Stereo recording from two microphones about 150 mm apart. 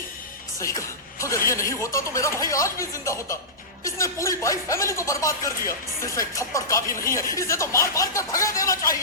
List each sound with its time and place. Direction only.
0.6 s speech: 20° left (ahead or behind)